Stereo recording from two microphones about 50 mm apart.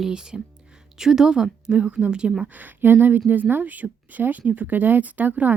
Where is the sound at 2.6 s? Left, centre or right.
Right.